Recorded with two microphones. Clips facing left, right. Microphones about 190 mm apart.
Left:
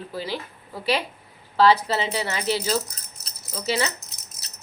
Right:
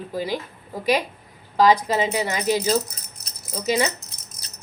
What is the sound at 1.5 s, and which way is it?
Speech, 15° right (ahead or behind).